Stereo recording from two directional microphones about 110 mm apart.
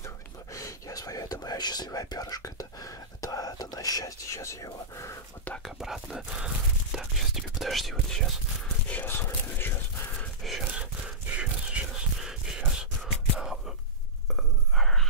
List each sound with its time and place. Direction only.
0.0 s whispering: 30° left (ahead or behind)
5.6 s speech: centre (ahead or behind)
8.8 s whispering: 15° left (ahead or behind)
10.4 s a sound: 5° right (ahead or behind)
14.3 s whispering: centre (ahead or behind)